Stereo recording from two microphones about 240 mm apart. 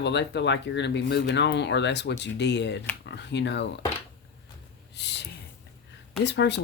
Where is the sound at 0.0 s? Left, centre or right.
Left.